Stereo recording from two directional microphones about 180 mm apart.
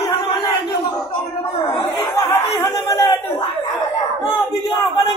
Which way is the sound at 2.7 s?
20° left (ahead or behind).